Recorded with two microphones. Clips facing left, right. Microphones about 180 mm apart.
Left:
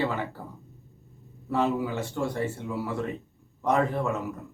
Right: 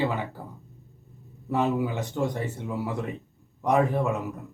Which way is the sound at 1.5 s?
15° right (ahead or behind).